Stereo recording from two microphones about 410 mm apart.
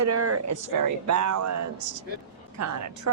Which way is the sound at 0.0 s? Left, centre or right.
Right.